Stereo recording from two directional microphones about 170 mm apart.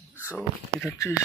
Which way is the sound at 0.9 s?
15° left (ahead or behind).